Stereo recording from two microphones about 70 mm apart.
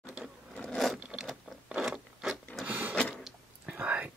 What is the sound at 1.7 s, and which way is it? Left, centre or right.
Rub, centre.